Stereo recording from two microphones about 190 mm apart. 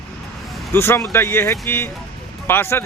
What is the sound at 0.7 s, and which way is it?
Speech, 15° left (ahead or behind).